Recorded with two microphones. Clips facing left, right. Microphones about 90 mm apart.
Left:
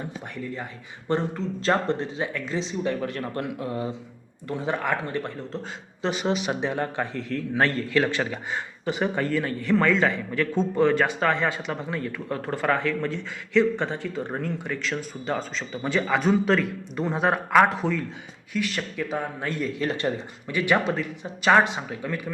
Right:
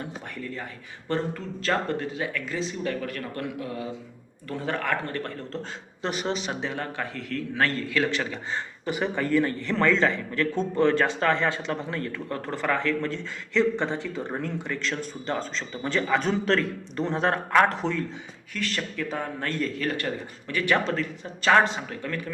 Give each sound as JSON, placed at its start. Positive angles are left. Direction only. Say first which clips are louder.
{"t": 1.0, "sound": "a man's voice", "louder": "left 3 dB", "side_deg": 20}
{"t": 4.4, "sound": "a man's voice", "louder": "left 2 dB", "side_deg": 20}
{"t": 19.9, "sound": "a man's voice", "louder": "left 3 dB", "side_deg": 25}